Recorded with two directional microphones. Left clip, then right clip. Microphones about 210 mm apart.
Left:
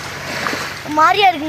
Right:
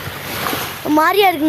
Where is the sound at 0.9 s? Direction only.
45° right (ahead or behind).